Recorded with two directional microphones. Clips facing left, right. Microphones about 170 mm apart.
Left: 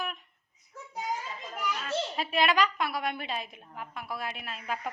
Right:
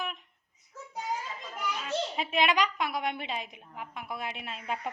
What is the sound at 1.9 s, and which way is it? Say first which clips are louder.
A woman's voice: right 1 dB; 15° right (ahead or behind).